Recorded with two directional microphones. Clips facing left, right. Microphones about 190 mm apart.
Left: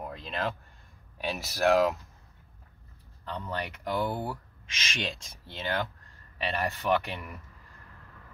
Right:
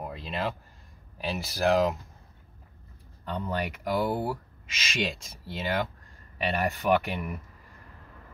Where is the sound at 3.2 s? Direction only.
10° right (ahead or behind).